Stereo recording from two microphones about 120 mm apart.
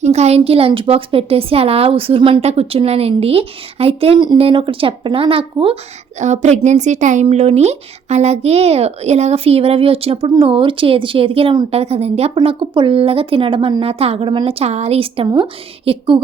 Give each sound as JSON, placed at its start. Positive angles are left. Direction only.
{"t": 0.0, "sound": "a woman's voice", "side_deg": -65}
{"t": 6.1, "sound": "a woman's voice", "side_deg": -75}